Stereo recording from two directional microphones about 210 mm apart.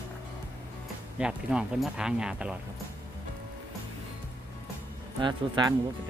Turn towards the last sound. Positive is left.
turn(degrees=-20)  # may be behind; listen again after turning